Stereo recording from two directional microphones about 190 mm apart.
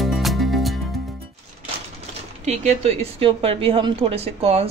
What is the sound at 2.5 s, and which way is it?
A woman's voice, 35° right (ahead or behind).